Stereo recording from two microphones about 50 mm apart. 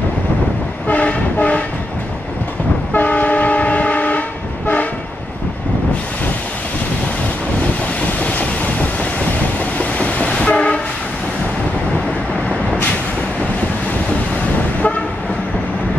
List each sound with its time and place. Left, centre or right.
0.8 s train: left
2.9 s train: left
8.2 s train: left
9.8 s train: left